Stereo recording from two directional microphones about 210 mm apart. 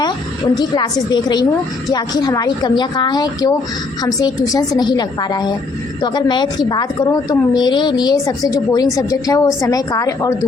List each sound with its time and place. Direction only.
0.6 s a woman's voice: 20° left (ahead or behind)